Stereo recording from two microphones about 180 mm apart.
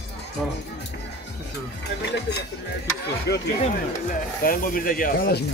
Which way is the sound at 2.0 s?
70° left (ahead or behind).